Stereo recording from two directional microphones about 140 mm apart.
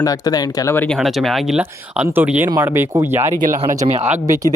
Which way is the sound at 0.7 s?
10° left (ahead or behind).